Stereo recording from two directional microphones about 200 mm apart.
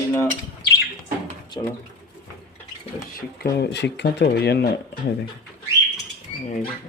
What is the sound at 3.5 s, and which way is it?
Speech, 55° left (ahead or behind).